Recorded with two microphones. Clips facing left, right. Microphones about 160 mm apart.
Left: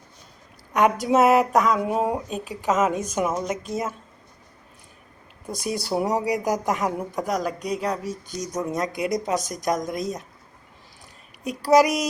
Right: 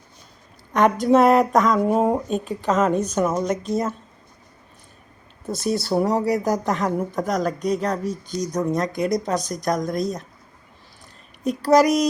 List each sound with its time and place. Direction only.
0.7 s speech: 10° left (ahead or behind)
5.5 s speech: 15° left (ahead or behind)
11.4 s speech: 10° left (ahead or behind)